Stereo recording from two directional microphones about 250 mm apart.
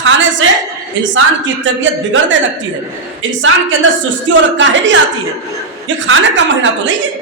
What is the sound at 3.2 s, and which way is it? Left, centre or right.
Speech, right.